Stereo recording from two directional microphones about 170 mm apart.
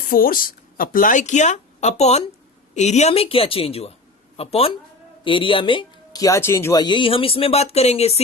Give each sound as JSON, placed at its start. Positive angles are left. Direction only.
{"t": 0.1, "sound": "speech", "side_deg": 55}